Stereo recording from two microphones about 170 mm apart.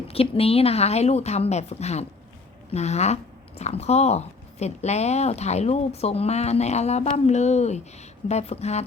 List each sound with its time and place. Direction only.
0.1 s speech: 35° left (ahead or behind)